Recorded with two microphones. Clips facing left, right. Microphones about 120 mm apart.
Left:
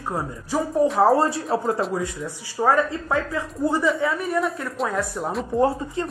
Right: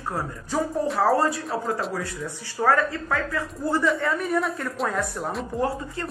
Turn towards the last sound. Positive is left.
turn(degrees=25)  # may be behind; listen again after turning